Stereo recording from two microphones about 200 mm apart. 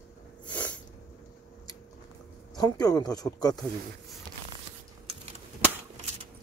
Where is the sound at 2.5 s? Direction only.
20° left (ahead or behind).